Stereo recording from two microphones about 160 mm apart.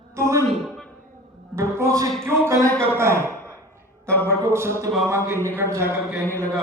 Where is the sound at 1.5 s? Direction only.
15° right (ahead or behind).